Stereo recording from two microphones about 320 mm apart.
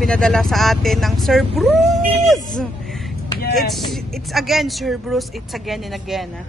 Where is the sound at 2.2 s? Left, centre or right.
Centre.